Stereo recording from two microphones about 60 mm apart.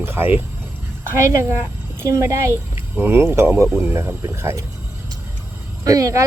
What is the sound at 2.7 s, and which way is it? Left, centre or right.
Speech, right.